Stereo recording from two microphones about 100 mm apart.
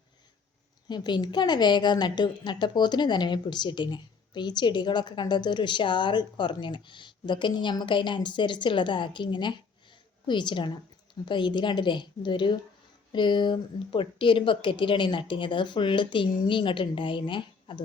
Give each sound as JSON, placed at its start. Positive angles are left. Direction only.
{"t": 0.9, "sound": "a woman's voice", "side_deg": 45}